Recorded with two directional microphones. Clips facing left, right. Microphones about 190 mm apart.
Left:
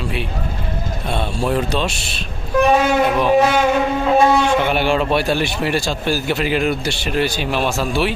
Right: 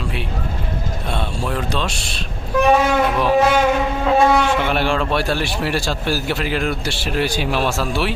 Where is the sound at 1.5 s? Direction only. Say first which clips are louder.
Left 3 dB; 15° left (ahead or behind).